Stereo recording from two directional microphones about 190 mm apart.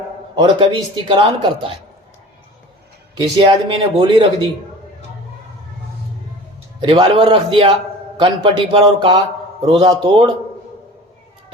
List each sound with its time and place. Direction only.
0.3 s a man's voice: 25° right (ahead or behind)
3.2 s a man's voice: 25° right (ahead or behind)
6.7 s a man's voice: 25° right (ahead or behind)